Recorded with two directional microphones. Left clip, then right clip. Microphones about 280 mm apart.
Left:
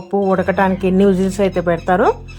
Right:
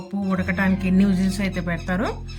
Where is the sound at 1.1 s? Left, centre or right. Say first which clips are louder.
Left 10 dB; left.